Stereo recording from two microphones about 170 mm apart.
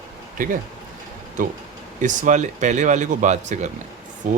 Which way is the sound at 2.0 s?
50° right (ahead or behind).